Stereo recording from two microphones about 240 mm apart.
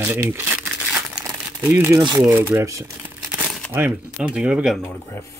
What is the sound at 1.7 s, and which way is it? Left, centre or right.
Speech, centre.